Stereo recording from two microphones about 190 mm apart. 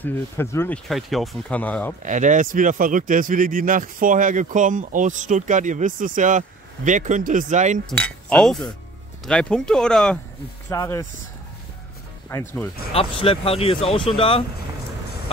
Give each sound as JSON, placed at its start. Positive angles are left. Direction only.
{"t": 0.0, "sound": "speech", "side_deg": 10}
{"t": 0.8, "sound": "speech", "side_deg": 0}
{"t": 2.0, "sound": "speech", "side_deg": -40}
{"t": 7.9, "sound": "speech", "side_deg": 5}
{"t": 10.7, "sound": "speech", "side_deg": 15}
{"t": 12.3, "sound": "speech", "side_deg": 15}
{"t": 12.9, "sound": "speech", "side_deg": 30}